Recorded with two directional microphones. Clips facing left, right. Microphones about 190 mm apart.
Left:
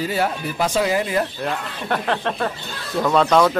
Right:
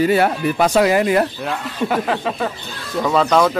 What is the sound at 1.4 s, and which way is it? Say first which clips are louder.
Speech: right 4 dB; 5° right (ahead or behind).